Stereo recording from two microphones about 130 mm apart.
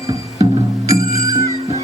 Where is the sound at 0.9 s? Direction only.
25° right (ahead or behind).